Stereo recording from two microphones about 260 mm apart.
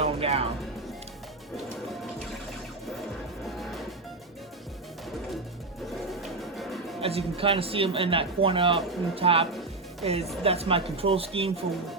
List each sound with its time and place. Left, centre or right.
0.0 s music: right
3.6 s music: centre
6.2 s music: centre
7.0 s speech: right